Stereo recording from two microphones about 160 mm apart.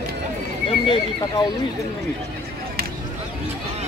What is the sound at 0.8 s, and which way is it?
Speech, 30° left (ahead or behind).